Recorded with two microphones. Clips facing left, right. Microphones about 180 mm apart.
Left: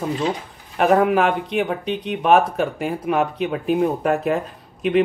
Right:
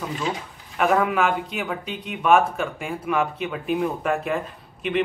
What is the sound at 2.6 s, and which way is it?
Speech, 40° left (ahead or behind).